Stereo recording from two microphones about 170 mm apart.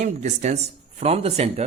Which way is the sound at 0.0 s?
45° right (ahead or behind).